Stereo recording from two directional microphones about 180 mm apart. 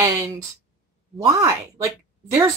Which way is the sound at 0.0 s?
20° right (ahead or behind).